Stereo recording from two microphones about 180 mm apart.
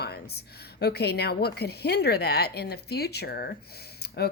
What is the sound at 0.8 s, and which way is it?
Speech, 65° left (ahead or behind).